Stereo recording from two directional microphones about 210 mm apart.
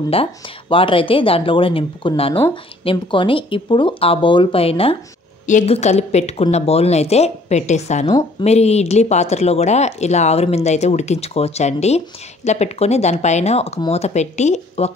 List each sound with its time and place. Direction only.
0.1 s speech: 25° left (ahead or behind)